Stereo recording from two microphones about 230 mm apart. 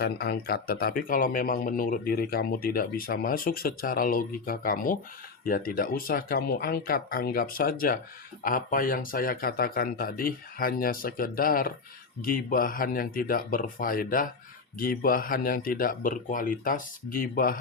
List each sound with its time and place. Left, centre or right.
0.0 s speech: left